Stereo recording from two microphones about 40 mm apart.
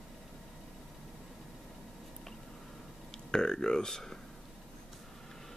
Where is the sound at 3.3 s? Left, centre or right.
Centre.